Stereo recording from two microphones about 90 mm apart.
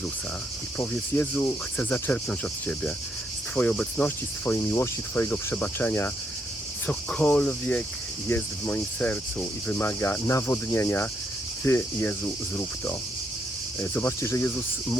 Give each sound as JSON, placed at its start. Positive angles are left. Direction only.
{"t": 1.1, "sound": "cricket", "side_deg": 25}
{"t": 4.5, "sound": "cricket", "side_deg": 30}
{"t": 14.2, "sound": "speech", "side_deg": 30}